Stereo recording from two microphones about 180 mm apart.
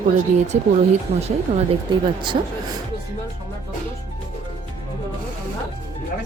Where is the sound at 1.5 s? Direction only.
25° right (ahead or behind).